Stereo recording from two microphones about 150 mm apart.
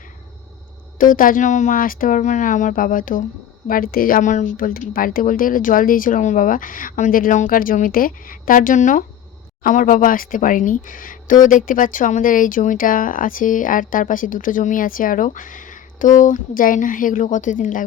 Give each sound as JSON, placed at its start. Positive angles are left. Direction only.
{"t": 0.9, "sound": "speech", "side_deg": 65}